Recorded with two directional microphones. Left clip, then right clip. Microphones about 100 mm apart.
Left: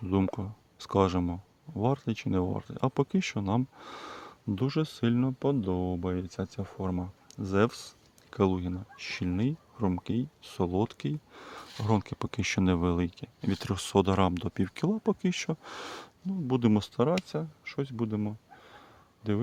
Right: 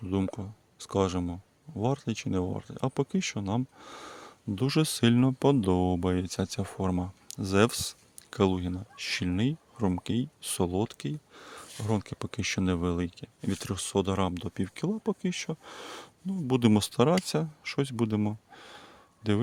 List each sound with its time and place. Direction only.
0.0 s speech: 5° left (ahead or behind)
4.6 s speech: 40° right (ahead or behind)
8.3 s speech: 15° right (ahead or behind)
10.7 s speech: centre (ahead or behind)
16.5 s speech: 30° right (ahead or behind)
17.2 s a sound: 55° right (ahead or behind); by 19.4 s 35° right (ahead or behind)